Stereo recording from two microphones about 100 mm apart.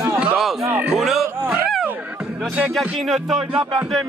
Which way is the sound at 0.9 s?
5° right (ahead or behind).